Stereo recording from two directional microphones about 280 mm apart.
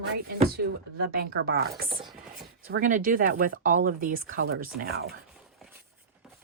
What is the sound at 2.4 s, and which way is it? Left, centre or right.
Speech, right.